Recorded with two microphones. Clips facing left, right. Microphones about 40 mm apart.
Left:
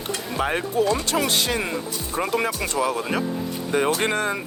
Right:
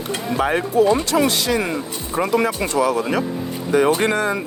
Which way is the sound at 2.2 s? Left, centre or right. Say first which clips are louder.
Right 5 dB; right.